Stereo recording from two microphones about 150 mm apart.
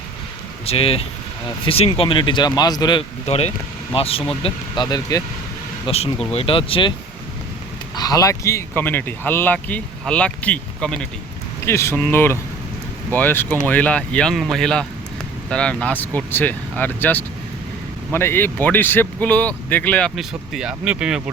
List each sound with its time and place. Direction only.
0.6 s speech: 40° left (ahead or behind)
3.2 s speech: 45° left (ahead or behind)
4.4 s speech: 30° left (ahead or behind)
5.8 s speech: 40° left (ahead or behind)
7.9 s speech: 25° left (ahead or behind); by 11.0 s 5° left (ahead or behind)
11.6 s speech: 20° left (ahead or behind); by 21.2 s 5° right (ahead or behind)